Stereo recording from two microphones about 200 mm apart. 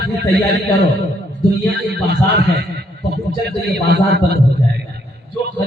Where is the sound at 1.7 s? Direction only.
55° right (ahead or behind).